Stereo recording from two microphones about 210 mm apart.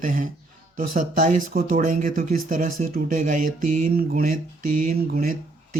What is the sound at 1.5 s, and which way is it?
Speech, 40° right (ahead or behind).